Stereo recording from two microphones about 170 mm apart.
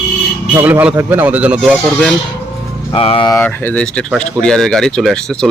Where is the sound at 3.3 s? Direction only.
15° left (ahead or behind).